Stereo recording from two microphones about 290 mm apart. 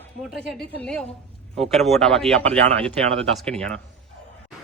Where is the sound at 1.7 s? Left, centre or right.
Centre.